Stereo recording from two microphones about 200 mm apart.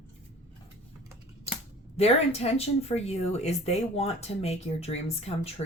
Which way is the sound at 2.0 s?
30° left (ahead or behind).